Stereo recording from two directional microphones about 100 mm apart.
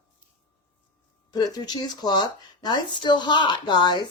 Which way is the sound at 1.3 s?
45° left (ahead or behind).